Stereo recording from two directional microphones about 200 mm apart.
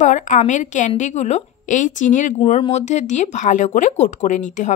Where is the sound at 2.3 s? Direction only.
30° left (ahead or behind).